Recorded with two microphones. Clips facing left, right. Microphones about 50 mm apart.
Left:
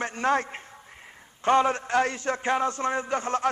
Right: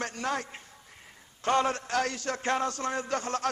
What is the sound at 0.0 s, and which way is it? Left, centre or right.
Speech, left.